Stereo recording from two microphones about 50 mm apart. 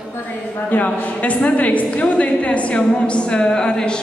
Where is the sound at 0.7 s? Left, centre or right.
Left.